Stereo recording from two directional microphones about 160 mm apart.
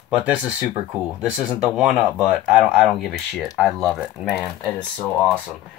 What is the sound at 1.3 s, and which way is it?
Speech, 5° right (ahead or behind).